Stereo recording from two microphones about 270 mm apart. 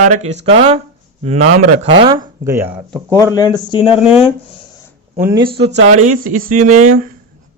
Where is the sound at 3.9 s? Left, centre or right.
Centre.